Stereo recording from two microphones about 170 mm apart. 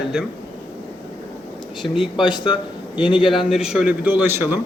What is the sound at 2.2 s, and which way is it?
Speech, 25° left (ahead or behind).